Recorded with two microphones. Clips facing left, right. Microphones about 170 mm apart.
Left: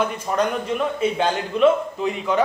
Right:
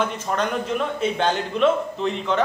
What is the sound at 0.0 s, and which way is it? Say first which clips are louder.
A man's voice: left 2 dB; 5° left (ahead or behind).